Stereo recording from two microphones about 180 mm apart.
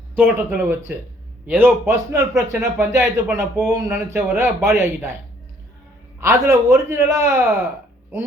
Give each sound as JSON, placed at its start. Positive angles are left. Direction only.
{"t": 0.2, "sound": "speech", "side_deg": -10}
{"t": 6.1, "sound": "speech", "side_deg": -15}